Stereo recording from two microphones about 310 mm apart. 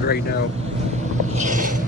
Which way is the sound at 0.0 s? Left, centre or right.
Left.